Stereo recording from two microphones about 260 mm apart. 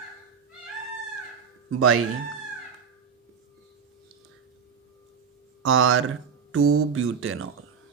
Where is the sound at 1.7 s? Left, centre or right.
Right.